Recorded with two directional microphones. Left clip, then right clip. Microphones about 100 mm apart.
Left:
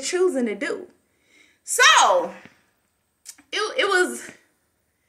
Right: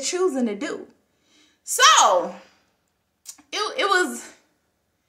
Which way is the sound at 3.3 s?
35° right (ahead or behind).